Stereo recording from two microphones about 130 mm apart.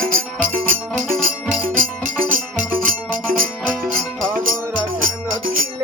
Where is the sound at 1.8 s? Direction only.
90° right.